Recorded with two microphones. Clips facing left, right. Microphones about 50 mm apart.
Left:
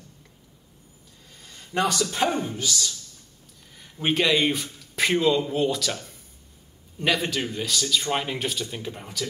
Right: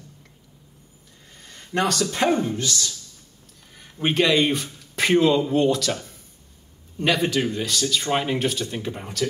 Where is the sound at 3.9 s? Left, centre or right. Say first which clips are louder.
Right 3 dB; centre.